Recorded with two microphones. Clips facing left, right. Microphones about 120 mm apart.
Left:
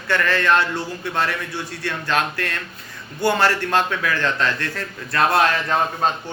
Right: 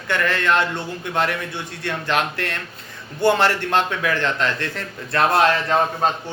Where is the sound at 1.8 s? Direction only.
20° right (ahead or behind).